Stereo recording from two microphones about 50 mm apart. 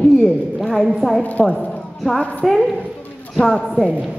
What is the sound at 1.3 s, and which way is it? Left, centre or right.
Speech, left.